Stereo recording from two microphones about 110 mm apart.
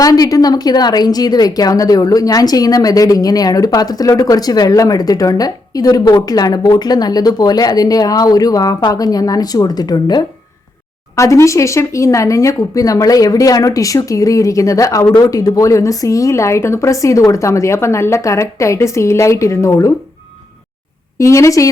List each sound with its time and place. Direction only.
0.0 s a woman's voice: 35° left (ahead or behind)
11.1 s a woman's voice: 30° left (ahead or behind)
21.2 s speech: 25° left (ahead or behind)